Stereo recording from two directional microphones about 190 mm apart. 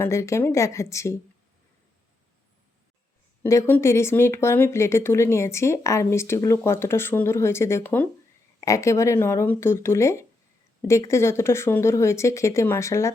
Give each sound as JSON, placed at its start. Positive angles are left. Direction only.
{"t": 0.0, "sound": "speech", "side_deg": 15}
{"t": 3.4, "sound": "speech", "side_deg": 15}